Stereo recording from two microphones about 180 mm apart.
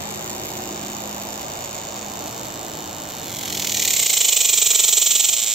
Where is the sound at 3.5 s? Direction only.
Centre (ahead or behind).